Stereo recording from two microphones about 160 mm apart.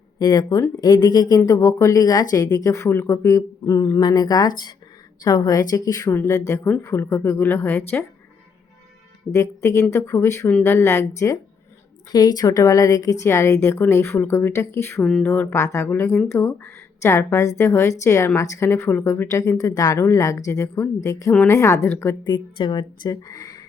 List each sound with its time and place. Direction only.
0.2 s speech: 25° left (ahead or behind)
9.3 s speech: 20° left (ahead or behind)
15.0 s speech: 5° left (ahead or behind)
15.3 s speech: 15° left (ahead or behind)
22.2 s speech: 30° left (ahead or behind)